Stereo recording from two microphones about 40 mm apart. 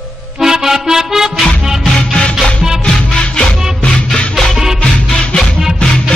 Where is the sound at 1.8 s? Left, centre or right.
Centre.